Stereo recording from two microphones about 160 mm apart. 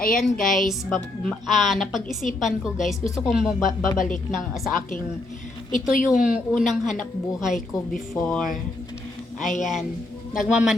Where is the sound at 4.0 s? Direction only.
55° left (ahead or behind).